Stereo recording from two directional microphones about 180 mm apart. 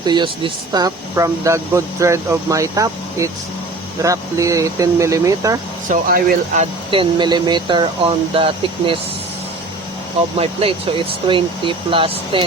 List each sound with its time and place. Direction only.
0.0 s speech: 25° right (ahead or behind)
5.9 s speech: 55° right (ahead or behind)
6.6 s speech: 30° right (ahead or behind)
10.3 s speech: 30° right (ahead or behind)